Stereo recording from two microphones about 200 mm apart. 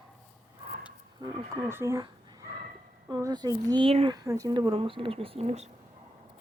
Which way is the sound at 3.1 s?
20° right (ahead or behind).